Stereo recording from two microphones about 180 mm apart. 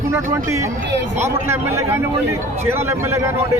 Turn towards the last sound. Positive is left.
turn(degrees=-15)  # may be behind; listen again after turning